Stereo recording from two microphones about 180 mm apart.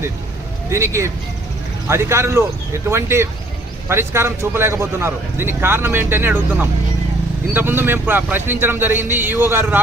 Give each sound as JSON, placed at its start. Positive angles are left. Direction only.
{"t": 0.7, "sound": "a man's voice", "side_deg": -15}